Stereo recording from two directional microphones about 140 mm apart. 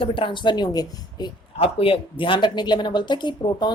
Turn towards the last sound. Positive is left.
turn(degrees=35)  # may be behind; listen again after turning